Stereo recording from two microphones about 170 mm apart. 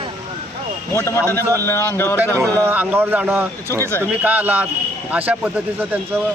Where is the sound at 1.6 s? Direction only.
15° left (ahead or behind).